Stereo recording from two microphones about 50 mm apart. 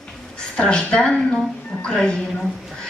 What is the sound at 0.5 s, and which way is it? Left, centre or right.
A woman's voice, centre.